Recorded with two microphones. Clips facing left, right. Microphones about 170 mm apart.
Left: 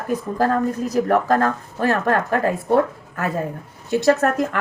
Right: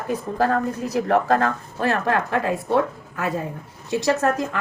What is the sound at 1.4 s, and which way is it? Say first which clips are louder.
A woman's voice: left 2 dB; 45° left (ahead or behind).